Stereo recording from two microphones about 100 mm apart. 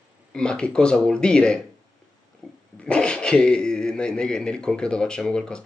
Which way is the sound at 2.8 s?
10° left (ahead or behind).